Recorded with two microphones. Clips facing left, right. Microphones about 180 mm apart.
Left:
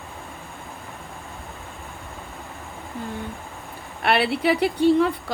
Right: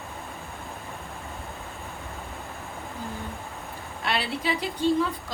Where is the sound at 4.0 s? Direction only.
65° left (ahead or behind).